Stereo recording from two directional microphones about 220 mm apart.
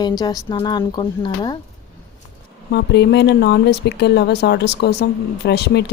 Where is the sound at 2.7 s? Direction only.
50° left (ahead or behind).